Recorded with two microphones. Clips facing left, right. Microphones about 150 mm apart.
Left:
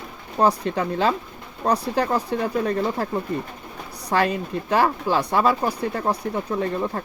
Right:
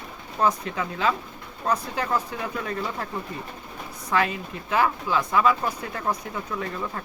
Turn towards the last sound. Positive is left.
turn(degrees=35)  # may be behind; listen again after turning